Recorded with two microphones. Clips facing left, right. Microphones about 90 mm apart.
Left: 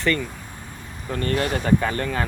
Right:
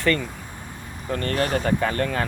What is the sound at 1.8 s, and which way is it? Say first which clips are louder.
Speech: right 1 dB; 20° left (ahead or behind).